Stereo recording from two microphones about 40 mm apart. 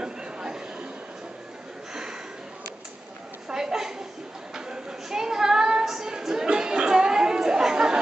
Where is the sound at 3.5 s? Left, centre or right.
Centre.